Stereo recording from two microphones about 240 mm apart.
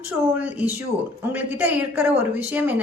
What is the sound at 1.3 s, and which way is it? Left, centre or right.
A woman's voice, centre.